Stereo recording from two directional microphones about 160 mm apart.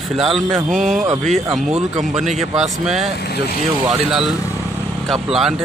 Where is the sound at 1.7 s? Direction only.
45° right (ahead or behind).